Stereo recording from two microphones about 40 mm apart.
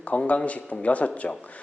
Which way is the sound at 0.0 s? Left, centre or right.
Left.